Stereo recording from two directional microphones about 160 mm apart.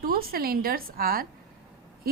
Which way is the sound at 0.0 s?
70° right (ahead or behind).